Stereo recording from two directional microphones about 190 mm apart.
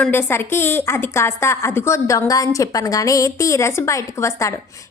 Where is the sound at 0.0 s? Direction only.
10° left (ahead or behind).